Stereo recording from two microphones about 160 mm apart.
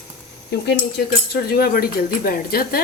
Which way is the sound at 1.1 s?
70° left (ahead or behind).